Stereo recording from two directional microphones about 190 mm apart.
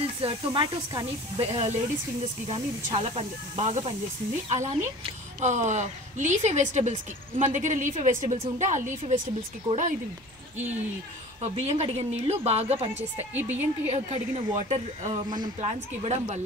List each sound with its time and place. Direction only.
0.0 s snake: 30° right (ahead or behind)
0.5 s a woman's voice: 25° right (ahead or behind)
11.4 s a woman's voice: 30° right (ahead or behind)
13.3 s a woman's voice: 10° right (ahead or behind)
13.8 s a woman's voice: 35° right (ahead or behind)
15.2 s speech: 20° right (ahead or behind)
15.6 s a woman's voice: 35° right (ahead or behind)